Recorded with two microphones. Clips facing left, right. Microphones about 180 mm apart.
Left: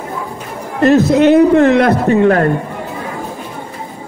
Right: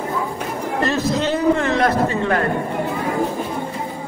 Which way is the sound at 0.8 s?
60° left (ahead or behind).